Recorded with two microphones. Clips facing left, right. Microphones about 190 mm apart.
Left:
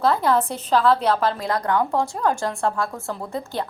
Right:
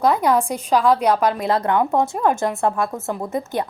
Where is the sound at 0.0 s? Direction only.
15° right (ahead or behind).